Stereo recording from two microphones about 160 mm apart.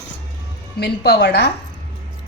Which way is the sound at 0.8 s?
90° left.